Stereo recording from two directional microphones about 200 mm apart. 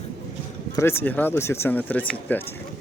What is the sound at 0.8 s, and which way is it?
Speech, 10° left (ahead or behind).